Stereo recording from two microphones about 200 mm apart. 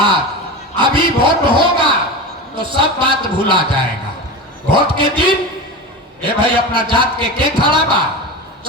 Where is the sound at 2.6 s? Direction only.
25° right (ahead or behind).